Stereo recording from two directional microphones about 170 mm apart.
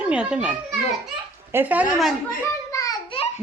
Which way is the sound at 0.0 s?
5° right (ahead or behind).